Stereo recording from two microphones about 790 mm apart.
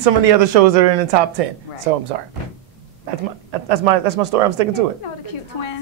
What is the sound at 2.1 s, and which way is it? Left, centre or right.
Speech, right.